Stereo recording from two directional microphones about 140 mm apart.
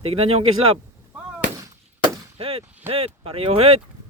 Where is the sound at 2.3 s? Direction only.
45° right (ahead or behind).